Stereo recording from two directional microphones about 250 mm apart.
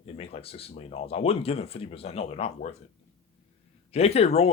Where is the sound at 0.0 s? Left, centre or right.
Left.